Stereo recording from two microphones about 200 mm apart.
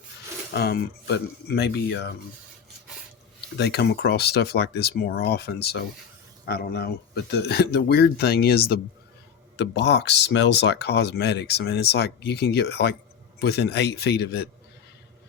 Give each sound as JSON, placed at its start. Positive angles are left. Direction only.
{"t": 0.5, "sound": "speech", "side_deg": 55}
{"t": 3.6, "sound": "speech", "side_deg": 55}